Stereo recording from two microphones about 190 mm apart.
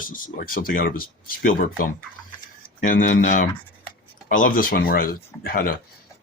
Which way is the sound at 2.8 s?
45° left (ahead or behind).